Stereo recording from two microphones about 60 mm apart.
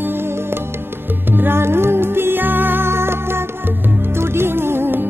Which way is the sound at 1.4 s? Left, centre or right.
Right.